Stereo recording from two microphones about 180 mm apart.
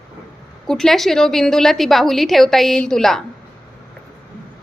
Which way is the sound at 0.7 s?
Centre (ahead or behind).